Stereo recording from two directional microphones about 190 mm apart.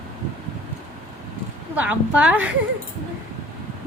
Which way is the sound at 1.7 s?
5° right (ahead or behind).